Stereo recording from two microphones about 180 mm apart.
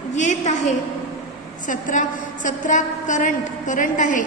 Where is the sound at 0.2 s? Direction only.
40° left (ahead or behind).